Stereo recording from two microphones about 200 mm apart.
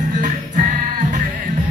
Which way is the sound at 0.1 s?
40° right (ahead or behind).